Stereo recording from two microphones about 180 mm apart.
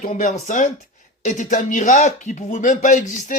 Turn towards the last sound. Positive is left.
turn(degrees=45)  # may be behind; listen again after turning